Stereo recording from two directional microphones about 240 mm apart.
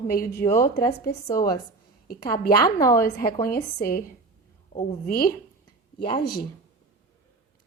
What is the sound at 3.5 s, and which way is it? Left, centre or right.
Speech, left.